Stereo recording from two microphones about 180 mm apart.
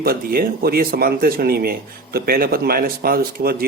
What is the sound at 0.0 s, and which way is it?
Speech, 55° right (ahead or behind).